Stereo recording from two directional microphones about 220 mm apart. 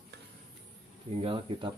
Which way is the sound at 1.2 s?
25° right (ahead or behind).